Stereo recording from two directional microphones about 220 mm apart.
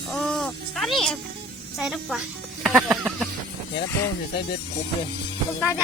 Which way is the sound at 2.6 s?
5° right (ahead or behind).